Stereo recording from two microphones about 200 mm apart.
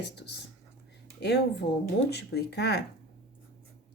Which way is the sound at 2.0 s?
55° left (ahead or behind).